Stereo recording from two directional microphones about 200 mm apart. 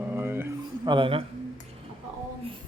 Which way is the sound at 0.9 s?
25° right (ahead or behind).